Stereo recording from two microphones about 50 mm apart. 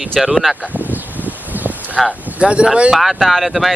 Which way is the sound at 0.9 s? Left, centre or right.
Right.